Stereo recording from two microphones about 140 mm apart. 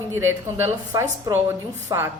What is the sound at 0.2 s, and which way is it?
A woman's voice, 20° right (ahead or behind).